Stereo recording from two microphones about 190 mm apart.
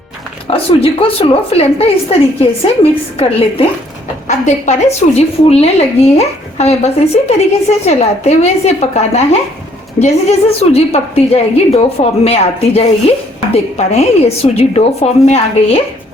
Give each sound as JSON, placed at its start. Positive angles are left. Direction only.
{"t": 0.5, "sound": "a woman's voice", "side_deg": 30}